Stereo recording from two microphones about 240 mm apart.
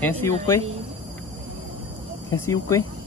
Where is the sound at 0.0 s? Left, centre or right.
Centre.